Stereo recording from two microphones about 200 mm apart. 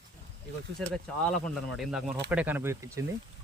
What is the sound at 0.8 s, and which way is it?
Speech, centre (ahead or behind).